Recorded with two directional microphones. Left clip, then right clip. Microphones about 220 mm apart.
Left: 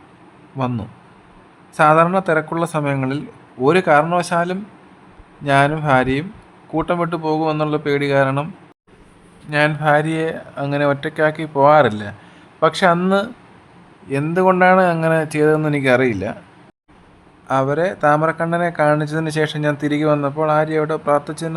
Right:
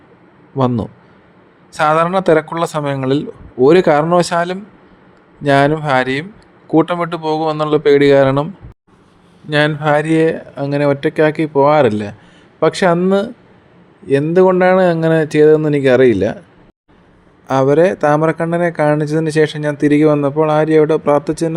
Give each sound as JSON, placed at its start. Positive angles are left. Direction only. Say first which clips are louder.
{"t": 0.5, "sound": "speech", "louder": "right 7 dB", "side_deg": -20}
{"t": 9.5, "sound": "speech", "louder": "right 2 dB", "side_deg": -15}
{"t": 14.3, "sound": "speech", "louder": "right 2 dB", "side_deg": -10}
{"t": 17.5, "sound": "speech", "louder": "right 6 dB", "side_deg": -15}